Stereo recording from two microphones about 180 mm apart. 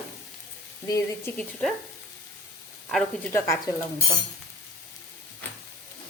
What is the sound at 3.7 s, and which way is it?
Speech, 15° left (ahead or behind).